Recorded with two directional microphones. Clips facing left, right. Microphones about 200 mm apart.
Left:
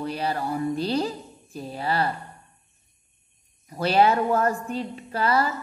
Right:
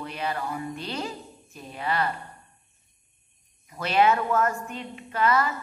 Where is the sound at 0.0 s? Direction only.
35° left (ahead or behind).